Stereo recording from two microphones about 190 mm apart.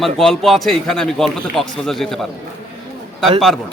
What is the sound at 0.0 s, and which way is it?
A man's voice, centre (ahead or behind).